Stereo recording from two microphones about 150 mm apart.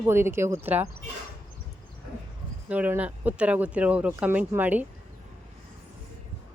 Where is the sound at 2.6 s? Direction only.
10° right (ahead or behind).